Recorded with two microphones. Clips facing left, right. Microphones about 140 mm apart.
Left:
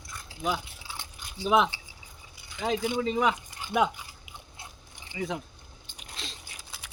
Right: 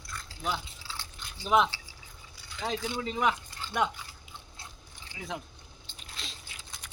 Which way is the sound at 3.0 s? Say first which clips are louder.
Left 2 dB; centre (ahead or behind).